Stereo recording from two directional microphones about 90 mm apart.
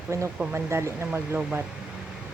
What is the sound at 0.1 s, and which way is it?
A woman's voice, 35° right (ahead or behind).